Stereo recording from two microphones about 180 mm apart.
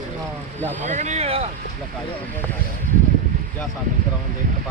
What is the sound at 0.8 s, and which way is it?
Vehicle, 40° right (ahead or behind).